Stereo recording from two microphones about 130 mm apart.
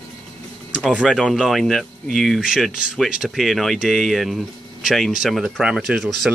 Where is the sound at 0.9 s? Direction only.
Centre (ahead or behind).